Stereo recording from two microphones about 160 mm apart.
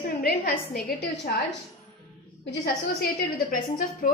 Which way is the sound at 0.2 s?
75° left (ahead or behind).